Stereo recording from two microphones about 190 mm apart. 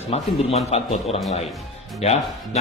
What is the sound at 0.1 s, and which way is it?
Speech, 30° left (ahead or behind).